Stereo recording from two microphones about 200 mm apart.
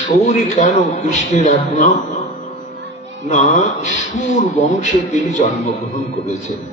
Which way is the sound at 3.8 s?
40° left (ahead or behind).